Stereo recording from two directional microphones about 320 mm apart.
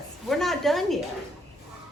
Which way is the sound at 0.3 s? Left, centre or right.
Centre.